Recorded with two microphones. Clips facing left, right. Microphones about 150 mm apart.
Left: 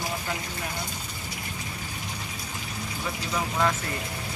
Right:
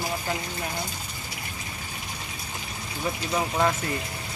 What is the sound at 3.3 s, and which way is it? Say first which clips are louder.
Speech: right 2 dB; 25° right (ahead or behind).